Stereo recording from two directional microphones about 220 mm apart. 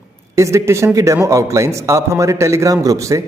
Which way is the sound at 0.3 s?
15° right (ahead or behind).